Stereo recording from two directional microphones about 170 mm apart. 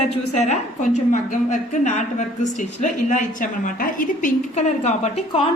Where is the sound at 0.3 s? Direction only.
40° left (ahead or behind).